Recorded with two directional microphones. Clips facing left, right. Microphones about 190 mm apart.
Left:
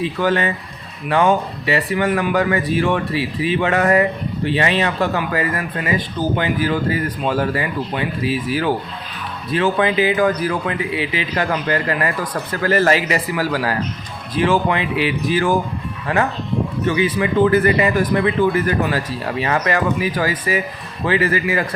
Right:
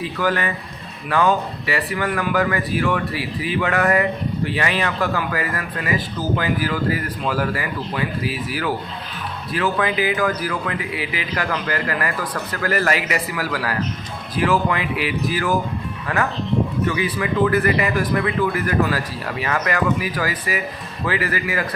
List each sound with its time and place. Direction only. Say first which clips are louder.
0.0 s speech: left 4 dB; 25° left (ahead or behind)
16.9 s speech: left 4 dB; 25° left (ahead or behind)